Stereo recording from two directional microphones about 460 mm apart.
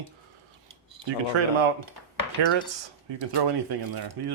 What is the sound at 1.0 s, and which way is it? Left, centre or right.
Speech, right.